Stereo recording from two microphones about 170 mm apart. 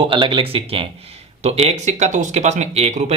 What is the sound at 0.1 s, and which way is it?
Speech, 30° right (ahead or behind).